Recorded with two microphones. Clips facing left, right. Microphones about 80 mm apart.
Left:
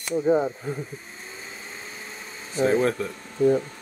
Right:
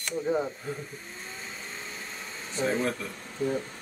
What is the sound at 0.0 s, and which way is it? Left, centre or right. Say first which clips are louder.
Speech: left 7 dB; centre.